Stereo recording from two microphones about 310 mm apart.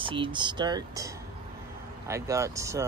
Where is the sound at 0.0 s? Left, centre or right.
Centre.